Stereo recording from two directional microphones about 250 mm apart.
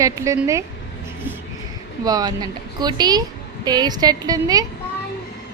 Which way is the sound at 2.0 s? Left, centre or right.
Centre.